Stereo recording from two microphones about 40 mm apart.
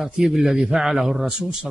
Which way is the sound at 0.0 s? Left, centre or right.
Centre.